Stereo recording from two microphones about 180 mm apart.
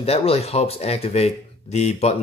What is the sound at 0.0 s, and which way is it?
Speech, 35° left (ahead or behind).